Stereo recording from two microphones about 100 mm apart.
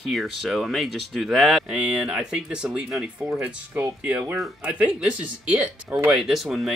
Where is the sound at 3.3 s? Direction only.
20° right (ahead or behind).